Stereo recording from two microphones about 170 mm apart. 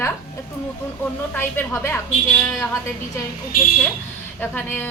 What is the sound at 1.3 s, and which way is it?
Speech, 15° left (ahead or behind).